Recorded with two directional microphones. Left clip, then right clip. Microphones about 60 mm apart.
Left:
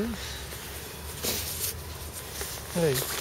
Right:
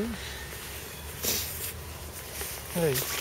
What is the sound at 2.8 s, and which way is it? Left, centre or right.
Speech, right.